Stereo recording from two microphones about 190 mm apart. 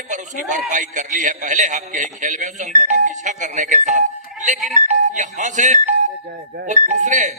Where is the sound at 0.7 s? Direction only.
40° right (ahead or behind).